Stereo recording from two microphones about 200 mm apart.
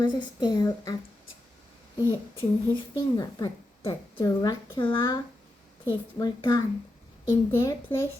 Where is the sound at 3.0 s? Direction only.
20° left (ahead or behind).